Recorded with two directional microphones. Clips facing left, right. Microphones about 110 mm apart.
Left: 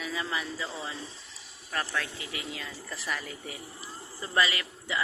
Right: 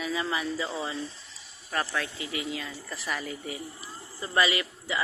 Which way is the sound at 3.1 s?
15° right (ahead or behind).